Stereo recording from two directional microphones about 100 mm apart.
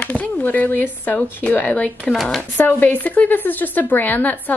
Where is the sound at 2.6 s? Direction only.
15° left (ahead or behind).